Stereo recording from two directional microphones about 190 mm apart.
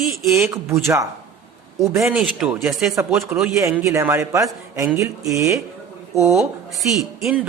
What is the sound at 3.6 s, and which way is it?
A man's voice, 15° right (ahead or behind).